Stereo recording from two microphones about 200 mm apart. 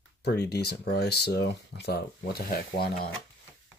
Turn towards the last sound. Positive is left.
turn(degrees=50)  # may be behind; listen again after turning